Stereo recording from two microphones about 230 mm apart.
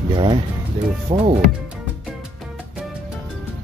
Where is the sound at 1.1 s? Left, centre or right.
Right.